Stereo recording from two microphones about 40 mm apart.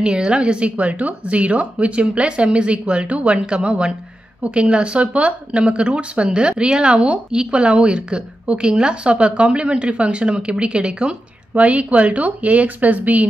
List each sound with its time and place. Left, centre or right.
0.0 s speech: right
11.5 s speech: right